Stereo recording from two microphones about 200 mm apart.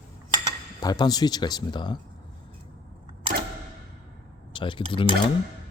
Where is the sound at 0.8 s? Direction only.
20° left (ahead or behind).